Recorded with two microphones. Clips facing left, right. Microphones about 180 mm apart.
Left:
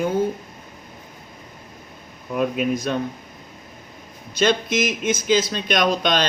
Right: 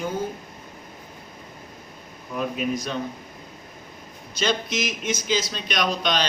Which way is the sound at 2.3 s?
55° left (ahead or behind).